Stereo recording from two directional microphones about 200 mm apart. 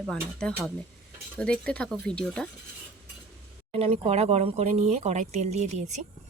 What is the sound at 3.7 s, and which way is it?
Speech, 30° right (ahead or behind).